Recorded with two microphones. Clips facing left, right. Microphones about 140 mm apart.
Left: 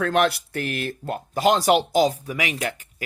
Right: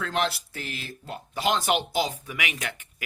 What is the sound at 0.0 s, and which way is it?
Speech, 55° left (ahead or behind).